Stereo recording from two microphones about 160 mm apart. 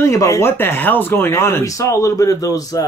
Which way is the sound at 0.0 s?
20° left (ahead or behind).